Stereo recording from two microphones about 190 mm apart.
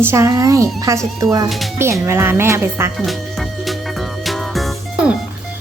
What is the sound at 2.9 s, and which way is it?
Music, centre (ahead or behind).